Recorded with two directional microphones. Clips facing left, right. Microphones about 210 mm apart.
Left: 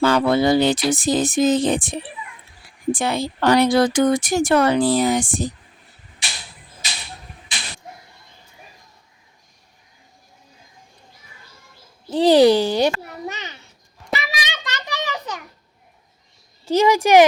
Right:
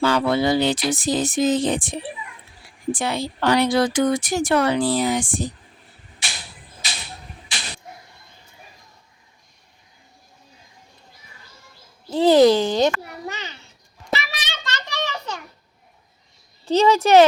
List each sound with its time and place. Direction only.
0.0 s speech: 50° left (ahead or behind)
12.1 s speech: 15° left (ahead or behind)
12.9 s a sound: 20° left (ahead or behind)
14.1 s child singing: 15° left (ahead or behind)
16.6 s speech: 10° left (ahead or behind)